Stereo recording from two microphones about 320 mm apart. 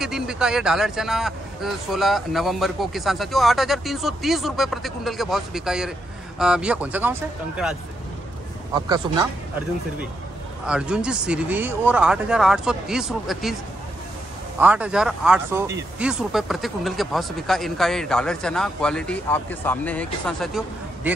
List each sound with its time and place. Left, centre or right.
0.0 s speech: centre
8.7 s a man's voice: centre
10.7 s speech: centre
14.6 s speech: centre